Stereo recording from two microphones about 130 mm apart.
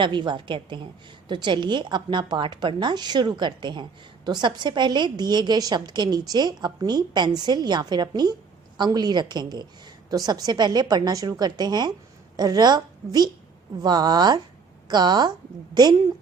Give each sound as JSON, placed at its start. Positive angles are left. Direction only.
{"t": 0.0, "sound": "a woman's voice", "side_deg": -35}